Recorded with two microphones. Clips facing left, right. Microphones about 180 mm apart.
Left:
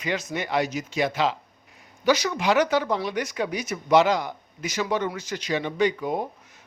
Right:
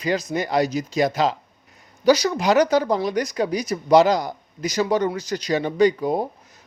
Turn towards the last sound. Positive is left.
turn(degrees=-35)  # may be behind; listen again after turning